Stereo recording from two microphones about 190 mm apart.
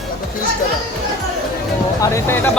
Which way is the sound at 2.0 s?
15° left (ahead or behind).